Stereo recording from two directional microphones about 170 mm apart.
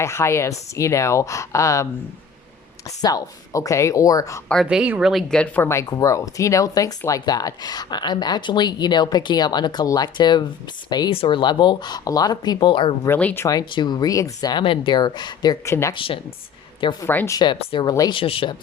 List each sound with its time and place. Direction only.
0.0 s speech: 15° left (ahead or behind)
3.0 s speech: 20° left (ahead or behind)
4.4 s speech: centre (ahead or behind); by 12.9 s 30° left (ahead or behind)
13.1 s speech: 10° left (ahead or behind)
16.0 s speech: 30° left (ahead or behind)
17.1 s speech: 15° left (ahead or behind); by 18.5 s 30° left (ahead or behind)